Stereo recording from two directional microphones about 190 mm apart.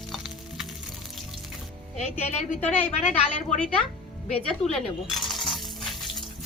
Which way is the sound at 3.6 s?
5° left (ahead or behind).